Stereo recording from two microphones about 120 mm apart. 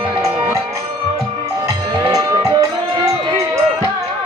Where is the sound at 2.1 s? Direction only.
30° right (ahead or behind).